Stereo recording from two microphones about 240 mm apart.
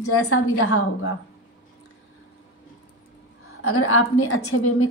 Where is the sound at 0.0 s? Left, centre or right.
Left.